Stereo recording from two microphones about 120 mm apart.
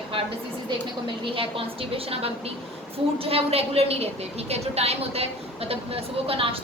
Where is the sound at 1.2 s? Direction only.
50° right (ahead or behind).